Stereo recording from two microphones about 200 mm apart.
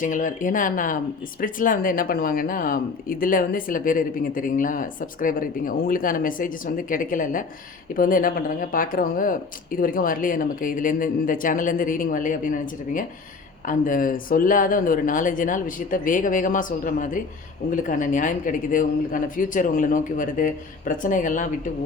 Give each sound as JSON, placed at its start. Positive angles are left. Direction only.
{"t": 0.0, "sound": "speech", "side_deg": 40}